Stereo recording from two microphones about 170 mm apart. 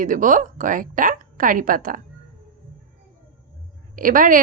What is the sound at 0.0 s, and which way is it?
A woman's voice, 50° right (ahead or behind).